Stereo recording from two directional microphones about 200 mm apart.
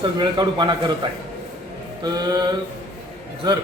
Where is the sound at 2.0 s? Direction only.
20° right (ahead or behind).